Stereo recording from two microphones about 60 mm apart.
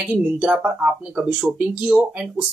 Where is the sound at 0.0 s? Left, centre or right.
Centre.